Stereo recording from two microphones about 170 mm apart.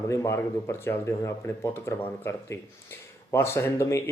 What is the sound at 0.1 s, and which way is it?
Speech, 15° left (ahead or behind).